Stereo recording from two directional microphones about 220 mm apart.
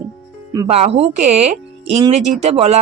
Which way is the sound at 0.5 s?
20° right (ahead or behind).